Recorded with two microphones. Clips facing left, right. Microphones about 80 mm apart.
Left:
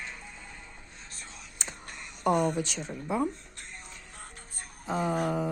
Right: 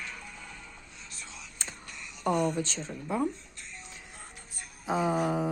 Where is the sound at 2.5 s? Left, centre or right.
Centre.